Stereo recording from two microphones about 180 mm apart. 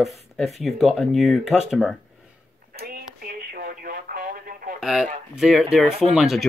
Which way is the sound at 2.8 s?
55° right (ahead or behind).